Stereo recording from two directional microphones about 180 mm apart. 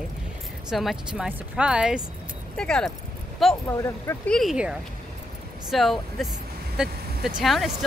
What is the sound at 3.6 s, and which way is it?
Speech, 15° left (ahead or behind).